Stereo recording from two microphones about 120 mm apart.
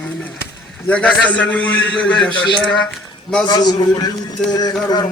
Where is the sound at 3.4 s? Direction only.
35° left (ahead or behind).